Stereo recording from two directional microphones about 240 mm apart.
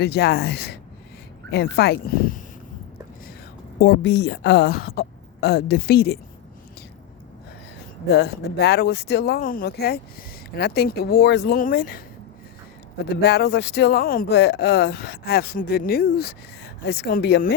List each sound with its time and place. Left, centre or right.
0.0 s speech: left
3.8 s speech: left
8.0 s speech: left
13.2 s speech: left